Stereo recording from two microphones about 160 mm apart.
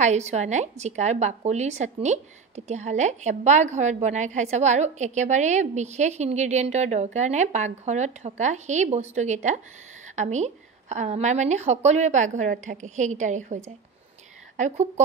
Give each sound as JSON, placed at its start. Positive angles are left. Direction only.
{"t": 0.0, "sound": "a woman's voice", "side_deg": -45}